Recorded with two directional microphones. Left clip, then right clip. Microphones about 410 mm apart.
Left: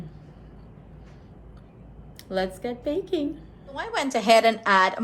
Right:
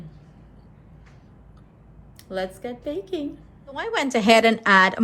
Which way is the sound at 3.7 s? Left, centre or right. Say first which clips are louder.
Right 3 dB; centre.